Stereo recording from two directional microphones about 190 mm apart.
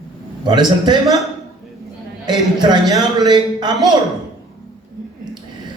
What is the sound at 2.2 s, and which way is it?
A man's voice, 20° right (ahead or behind).